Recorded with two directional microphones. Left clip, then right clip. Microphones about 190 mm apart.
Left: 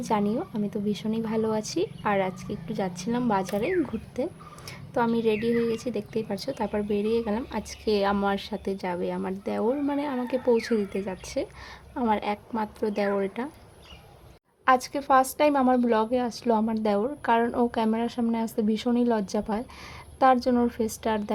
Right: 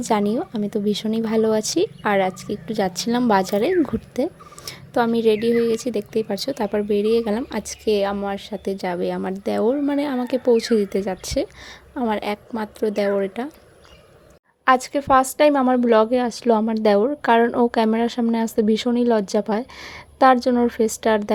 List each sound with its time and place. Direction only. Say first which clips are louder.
0.0 s a woman's voice: right 6 dB; 25° right (ahead or behind)
8.1 s a woman's voice: right 1 dB; centre (ahead or behind); by 13.5 s 15° right (ahead or behind)
14.6 s a woman's voice: right 5 dB; 20° right (ahead or behind)